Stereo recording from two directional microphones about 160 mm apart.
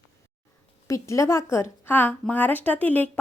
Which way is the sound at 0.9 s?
20° left (ahead or behind).